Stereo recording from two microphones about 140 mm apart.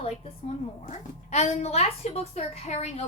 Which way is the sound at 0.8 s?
55° left (ahead or behind).